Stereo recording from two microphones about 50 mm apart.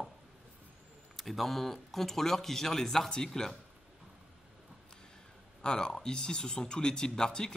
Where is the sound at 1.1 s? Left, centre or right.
Centre.